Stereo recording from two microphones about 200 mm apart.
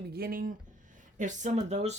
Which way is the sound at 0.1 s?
50° right (ahead or behind).